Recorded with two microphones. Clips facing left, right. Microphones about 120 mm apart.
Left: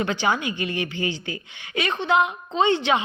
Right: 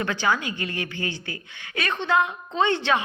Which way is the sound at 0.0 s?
20° left (ahead or behind).